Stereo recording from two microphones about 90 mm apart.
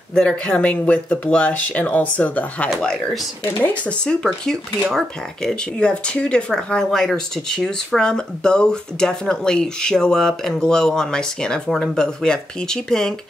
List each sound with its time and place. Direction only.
0.1 s speech: 10° left (ahead or behind)
2.7 s speech: 5° left (ahead or behind)